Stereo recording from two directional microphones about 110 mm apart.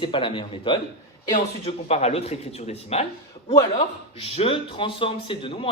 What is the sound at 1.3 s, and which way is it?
A man's voice, 75° left (ahead or behind).